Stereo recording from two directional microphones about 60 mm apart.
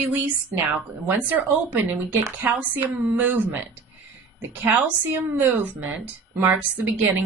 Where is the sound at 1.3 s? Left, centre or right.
Right.